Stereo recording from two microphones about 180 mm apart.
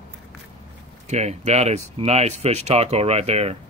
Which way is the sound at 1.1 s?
40° right (ahead or behind).